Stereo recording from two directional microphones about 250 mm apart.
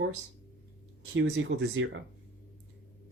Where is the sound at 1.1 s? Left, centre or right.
Right.